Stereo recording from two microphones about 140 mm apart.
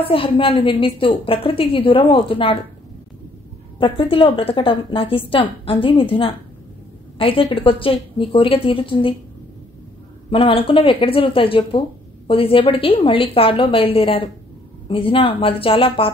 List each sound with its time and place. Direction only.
0.0 s a woman's voice: 40° left (ahead or behind)
3.7 s a woman's voice: 40° left (ahead or behind)
10.3 s a woman's voice: 40° left (ahead or behind)